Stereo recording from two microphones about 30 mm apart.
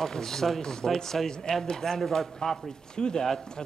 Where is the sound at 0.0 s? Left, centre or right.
Centre.